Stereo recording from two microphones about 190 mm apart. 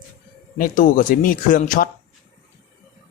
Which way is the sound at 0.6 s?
45° left (ahead or behind).